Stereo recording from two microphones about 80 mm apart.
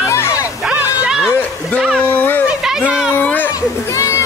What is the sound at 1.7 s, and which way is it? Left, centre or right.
Speech, centre.